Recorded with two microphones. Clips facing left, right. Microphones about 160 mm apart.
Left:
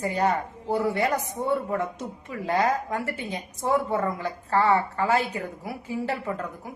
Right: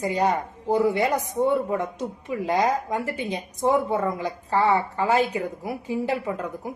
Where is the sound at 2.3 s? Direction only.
15° right (ahead or behind).